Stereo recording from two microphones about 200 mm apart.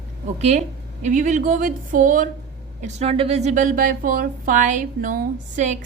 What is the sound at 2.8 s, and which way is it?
A woman's voice, 30° right (ahead or behind).